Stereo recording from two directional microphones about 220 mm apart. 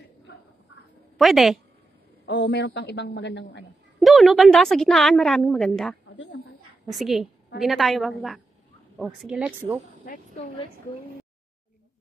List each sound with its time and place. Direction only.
1.1 s a woman's voice: centre (ahead or behind)
2.2 s a woman's voice: 50° left (ahead or behind)
4.0 s a woman's voice: centre (ahead or behind)